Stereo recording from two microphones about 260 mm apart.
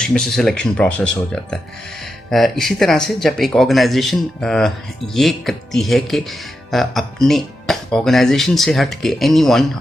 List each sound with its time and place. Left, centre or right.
0.0 s speech: centre